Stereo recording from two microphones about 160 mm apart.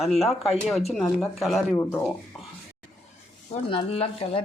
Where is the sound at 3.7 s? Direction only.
35° left (ahead or behind).